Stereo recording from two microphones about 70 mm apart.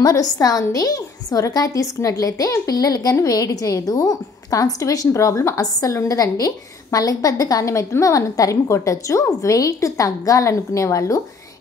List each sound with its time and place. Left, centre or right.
0.0 s a woman's voice: left